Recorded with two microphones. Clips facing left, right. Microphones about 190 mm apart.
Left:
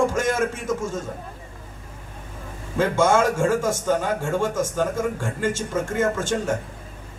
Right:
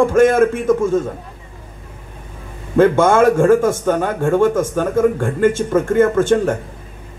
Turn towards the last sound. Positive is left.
turn(degrees=-55)  # may be behind; listen again after turning